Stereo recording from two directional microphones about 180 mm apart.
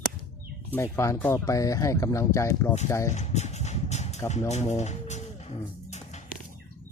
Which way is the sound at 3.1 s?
40° left (ahead or behind).